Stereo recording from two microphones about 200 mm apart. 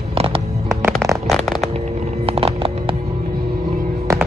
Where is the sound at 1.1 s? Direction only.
Centre (ahead or behind).